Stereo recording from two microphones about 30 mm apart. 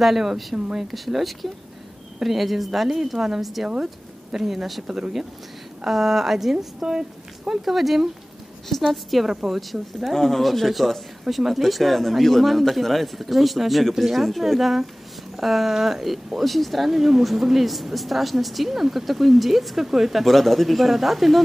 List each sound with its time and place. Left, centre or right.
0.0 s speech: centre
5.9 s speech: centre
7.6 s speech: centre
10.1 s speech: centre
10.4 s speech: centre
16.3 s speech: centre